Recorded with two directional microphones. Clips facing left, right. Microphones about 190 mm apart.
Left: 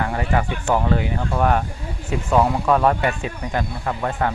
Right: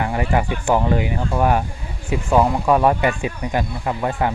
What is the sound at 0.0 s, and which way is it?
Speech, 15° right (ahead or behind).